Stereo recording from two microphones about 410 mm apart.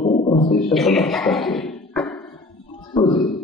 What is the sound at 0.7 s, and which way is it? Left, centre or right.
Speech, centre.